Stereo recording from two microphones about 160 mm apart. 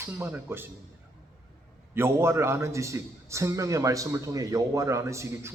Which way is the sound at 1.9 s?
15° right (ahead or behind).